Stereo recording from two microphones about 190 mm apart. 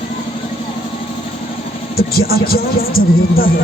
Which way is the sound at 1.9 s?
55° left (ahead or behind).